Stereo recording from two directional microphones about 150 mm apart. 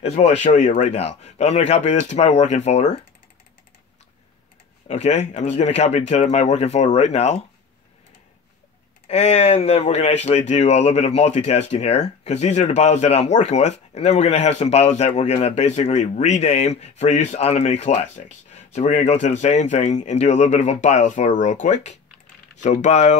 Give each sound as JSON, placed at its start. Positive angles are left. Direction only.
{"t": 0.0, "sound": "speech", "side_deg": 45}
{"t": 4.8, "sound": "speech", "side_deg": 45}
{"t": 9.0, "sound": "speech", "side_deg": 45}